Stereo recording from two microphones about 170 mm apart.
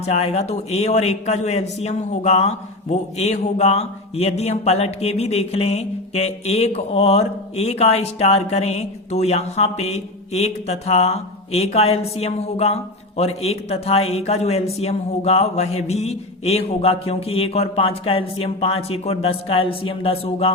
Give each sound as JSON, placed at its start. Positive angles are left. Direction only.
{"t": 0.1, "sound": "a man's voice", "side_deg": 40}